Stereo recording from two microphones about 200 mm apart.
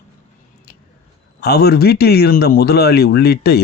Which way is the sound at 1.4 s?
55° left (ahead or behind).